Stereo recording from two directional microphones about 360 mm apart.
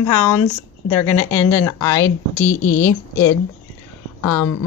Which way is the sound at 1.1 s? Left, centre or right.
Centre.